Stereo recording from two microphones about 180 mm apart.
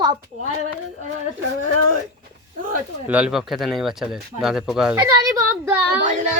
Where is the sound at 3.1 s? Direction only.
5° right (ahead or behind).